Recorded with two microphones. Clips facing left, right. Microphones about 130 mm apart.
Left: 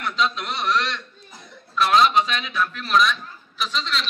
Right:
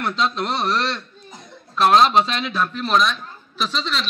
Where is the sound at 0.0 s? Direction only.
35° right (ahead or behind).